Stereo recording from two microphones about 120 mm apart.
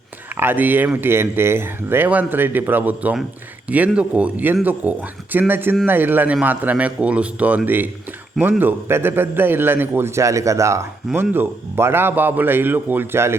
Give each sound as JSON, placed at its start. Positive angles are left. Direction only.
{"t": 0.3, "sound": "a man's voice", "side_deg": -15}